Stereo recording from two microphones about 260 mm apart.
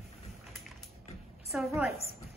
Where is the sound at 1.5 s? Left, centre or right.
Centre.